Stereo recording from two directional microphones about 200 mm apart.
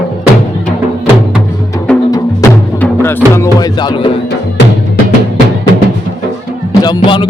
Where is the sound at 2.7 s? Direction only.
10° left (ahead or behind).